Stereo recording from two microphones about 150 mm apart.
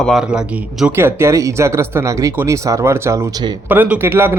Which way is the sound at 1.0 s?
15° right (ahead or behind).